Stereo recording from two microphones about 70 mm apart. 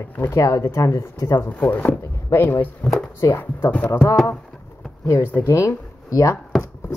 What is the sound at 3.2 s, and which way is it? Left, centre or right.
Speech, left.